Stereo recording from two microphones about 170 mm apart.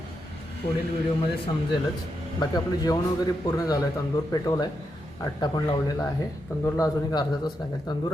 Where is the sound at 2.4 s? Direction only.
25° left (ahead or behind).